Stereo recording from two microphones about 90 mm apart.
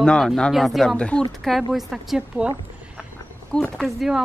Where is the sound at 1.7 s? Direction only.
5° right (ahead or behind).